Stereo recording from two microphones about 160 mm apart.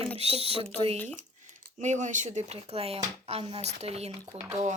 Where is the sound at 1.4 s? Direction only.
50° right (ahead or behind).